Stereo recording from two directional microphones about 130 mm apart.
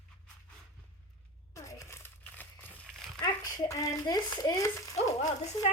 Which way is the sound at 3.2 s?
30° left (ahead or behind).